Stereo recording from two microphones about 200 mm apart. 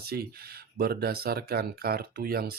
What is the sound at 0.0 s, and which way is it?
Speech, 50° right (ahead or behind).